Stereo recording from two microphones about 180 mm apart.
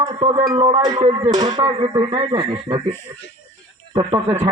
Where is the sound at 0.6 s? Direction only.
30° right (ahead or behind).